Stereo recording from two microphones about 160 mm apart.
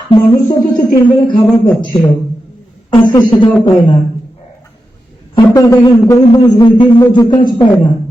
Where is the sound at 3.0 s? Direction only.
30° left (ahead or behind).